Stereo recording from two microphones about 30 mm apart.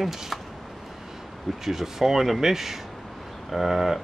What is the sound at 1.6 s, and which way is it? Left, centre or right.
Speech, centre.